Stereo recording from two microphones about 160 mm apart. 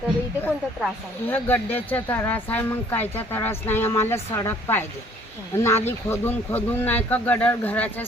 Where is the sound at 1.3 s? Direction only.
10° left (ahead or behind).